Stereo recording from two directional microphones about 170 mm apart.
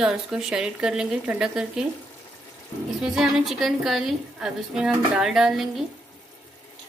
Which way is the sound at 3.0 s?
5° right (ahead or behind).